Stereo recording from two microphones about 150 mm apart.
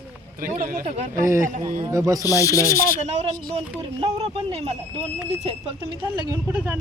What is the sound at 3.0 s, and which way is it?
Speech, 45° right (ahead or behind).